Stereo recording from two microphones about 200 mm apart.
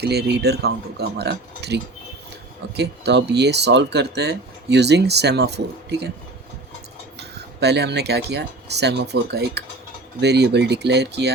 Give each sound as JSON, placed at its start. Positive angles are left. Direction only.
{"t": 0.0, "sound": "speech", "side_deg": -55}
{"t": 7.2, "sound": "speech", "side_deg": -55}